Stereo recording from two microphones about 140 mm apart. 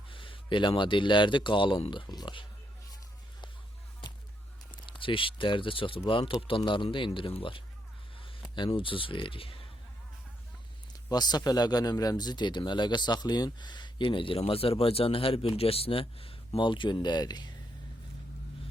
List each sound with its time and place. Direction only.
0.1 s a man's voice: 40° left (ahead or behind)
4.7 s speech: 40° left (ahead or behind)
10.9 s speech: 30° left (ahead or behind)